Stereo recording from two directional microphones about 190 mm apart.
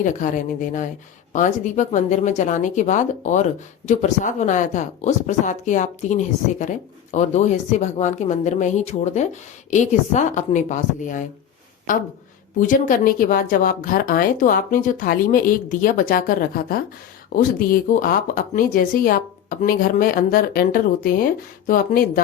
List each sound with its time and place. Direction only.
1.3 s speech: 40° left (ahead or behind)